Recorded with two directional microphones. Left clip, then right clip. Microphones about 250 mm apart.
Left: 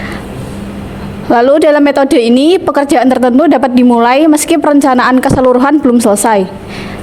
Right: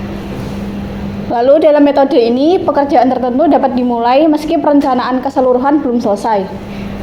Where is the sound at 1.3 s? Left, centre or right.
Left.